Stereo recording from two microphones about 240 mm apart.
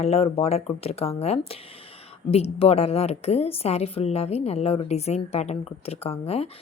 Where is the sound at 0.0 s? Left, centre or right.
Left.